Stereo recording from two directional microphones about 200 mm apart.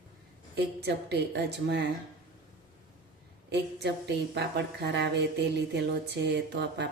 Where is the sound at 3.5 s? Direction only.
60° right (ahead or behind).